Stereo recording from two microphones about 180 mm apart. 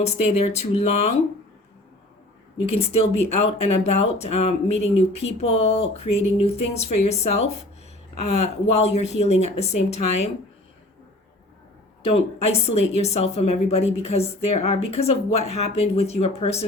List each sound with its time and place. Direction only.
0.0 s a woman's voice: 35° left (ahead or behind)
2.6 s a woman's voice: 35° left (ahead or behind)
12.0 s a woman's voice: 35° left (ahead or behind)